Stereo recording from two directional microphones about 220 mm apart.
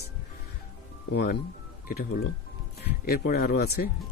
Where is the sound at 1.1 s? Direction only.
45° left (ahead or behind).